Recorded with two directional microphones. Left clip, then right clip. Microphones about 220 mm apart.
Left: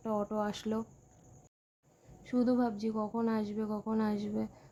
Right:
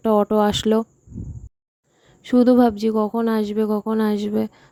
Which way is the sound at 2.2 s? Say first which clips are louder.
Right 16 dB; 40° right (ahead or behind).